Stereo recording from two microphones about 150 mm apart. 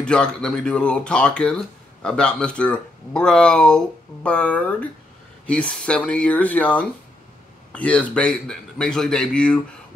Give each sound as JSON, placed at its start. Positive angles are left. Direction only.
{"t": 0.0, "sound": "a man's voice", "side_deg": 5}